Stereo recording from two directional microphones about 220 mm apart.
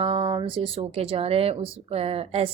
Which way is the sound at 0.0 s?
25° right (ahead or behind).